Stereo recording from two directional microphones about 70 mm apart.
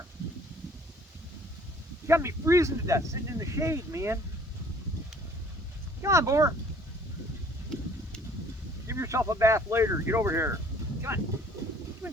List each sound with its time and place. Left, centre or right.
2.0 s speech: right
6.0 s speech: right
8.9 s speech: right